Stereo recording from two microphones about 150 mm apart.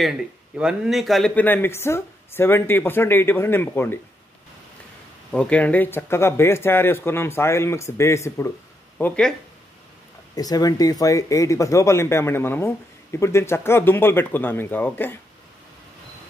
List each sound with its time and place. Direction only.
0.0 s speech: 5° right (ahead or behind); by 4.0 s 15° left (ahead or behind)
5.3 s speech: 5° left (ahead or behind)
10.3 s speech: 25° left (ahead or behind)